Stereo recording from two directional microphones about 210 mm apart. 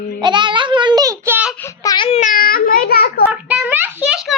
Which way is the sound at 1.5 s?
15° left (ahead or behind).